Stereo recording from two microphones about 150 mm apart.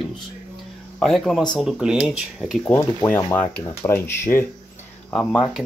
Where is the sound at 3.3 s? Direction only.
15° left (ahead or behind).